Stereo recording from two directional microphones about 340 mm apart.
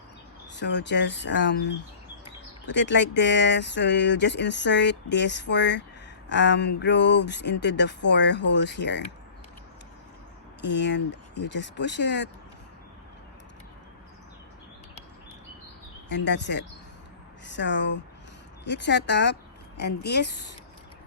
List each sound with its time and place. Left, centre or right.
0.5 s speech: left
10.6 s speech: left
16.0 s speech: left